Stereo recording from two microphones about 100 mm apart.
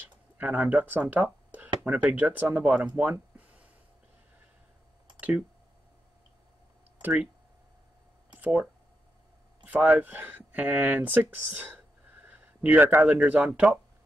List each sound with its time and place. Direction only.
0.4 s speech: 10° right (ahead or behind)
3.0 s a sound: 15° right (ahead or behind)
7.0 s speech: 15° right (ahead or behind)
8.4 s speech: 15° right (ahead or behind)
9.7 s speech: 15° right (ahead or behind)